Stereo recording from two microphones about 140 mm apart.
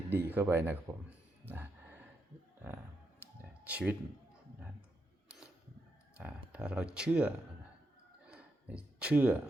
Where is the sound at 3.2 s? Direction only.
10° right (ahead or behind).